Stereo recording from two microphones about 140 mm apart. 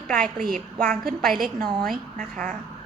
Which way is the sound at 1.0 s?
90° right.